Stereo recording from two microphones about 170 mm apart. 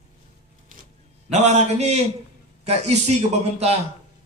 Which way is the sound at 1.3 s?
40° right (ahead or behind).